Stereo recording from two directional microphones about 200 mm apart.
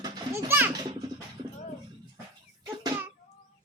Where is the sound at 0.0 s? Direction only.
15° right (ahead or behind).